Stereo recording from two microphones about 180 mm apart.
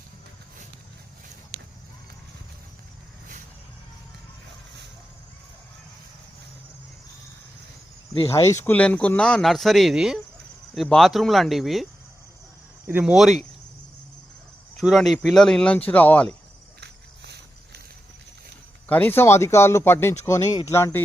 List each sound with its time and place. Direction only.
8.3 s speech: 15° left (ahead or behind); by 11.9 s centre (ahead or behind)
12.9 s speech: 10° right (ahead or behind)
14.8 s speech: centre (ahead or behind)
16.8 s a sound: 65° right (ahead or behind)
18.9 s speech: 10° left (ahead or behind)